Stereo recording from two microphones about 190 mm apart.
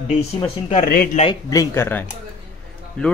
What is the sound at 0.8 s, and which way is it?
Speech, 50° left (ahead or behind).